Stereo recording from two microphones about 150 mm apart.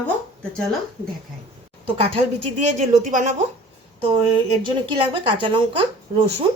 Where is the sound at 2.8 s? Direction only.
55° right (ahead or behind).